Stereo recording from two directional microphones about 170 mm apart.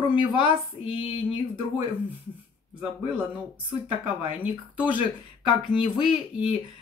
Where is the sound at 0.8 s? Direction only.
30° left (ahead or behind).